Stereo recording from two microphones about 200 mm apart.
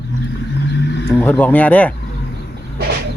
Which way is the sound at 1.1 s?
10° left (ahead or behind).